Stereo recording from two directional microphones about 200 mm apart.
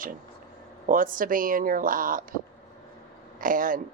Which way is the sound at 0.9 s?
45° right (ahead or behind).